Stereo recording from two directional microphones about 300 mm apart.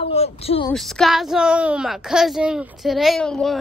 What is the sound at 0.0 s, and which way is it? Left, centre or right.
Speech, centre.